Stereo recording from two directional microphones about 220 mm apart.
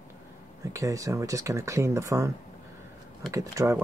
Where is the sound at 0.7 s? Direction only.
15° right (ahead or behind).